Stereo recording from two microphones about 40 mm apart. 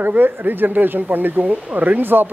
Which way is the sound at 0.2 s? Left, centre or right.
Right.